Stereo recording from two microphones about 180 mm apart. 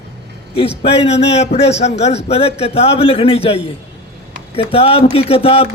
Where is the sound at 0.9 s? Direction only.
35° left (ahead or behind).